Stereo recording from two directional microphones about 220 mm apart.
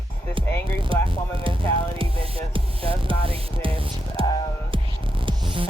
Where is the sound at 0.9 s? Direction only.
25° right (ahead or behind).